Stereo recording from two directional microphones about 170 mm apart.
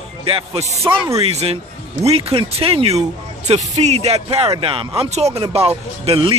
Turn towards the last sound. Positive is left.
turn(degrees=-35)  # may be behind; listen again after turning